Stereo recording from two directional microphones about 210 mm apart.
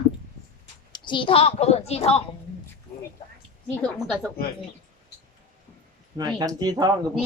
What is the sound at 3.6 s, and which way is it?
Speech, 5° left (ahead or behind).